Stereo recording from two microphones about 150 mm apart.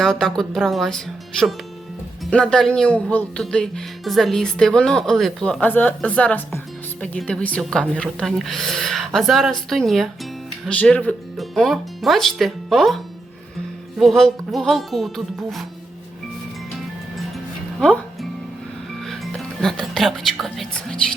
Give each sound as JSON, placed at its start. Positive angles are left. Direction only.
{"t": 0.0, "sound": "speech", "side_deg": 5}
{"t": 14.0, "sound": "speech", "side_deg": 0}
{"t": 17.2, "sound": "music", "side_deg": 0}
{"t": 20.4, "sound": "speech", "side_deg": 0}